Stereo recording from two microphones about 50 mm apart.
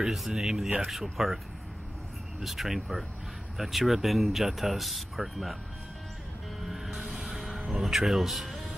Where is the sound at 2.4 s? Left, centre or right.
Centre.